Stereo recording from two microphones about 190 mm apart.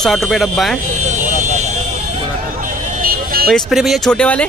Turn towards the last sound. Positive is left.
turn(degrees=5)  # may be behind; listen again after turning